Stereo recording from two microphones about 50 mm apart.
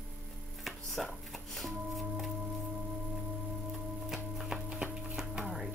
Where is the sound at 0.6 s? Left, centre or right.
Centre.